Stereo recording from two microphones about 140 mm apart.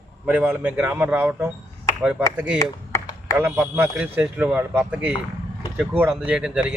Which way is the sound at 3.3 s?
15° right (ahead or behind).